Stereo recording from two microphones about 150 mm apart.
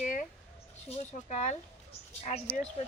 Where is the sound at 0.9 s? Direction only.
45° left (ahead or behind).